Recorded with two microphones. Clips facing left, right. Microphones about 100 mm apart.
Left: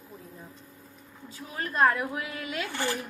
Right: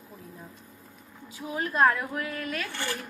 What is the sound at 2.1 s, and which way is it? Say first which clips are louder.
Speech: right 1 dB; 15° left (ahead or behind).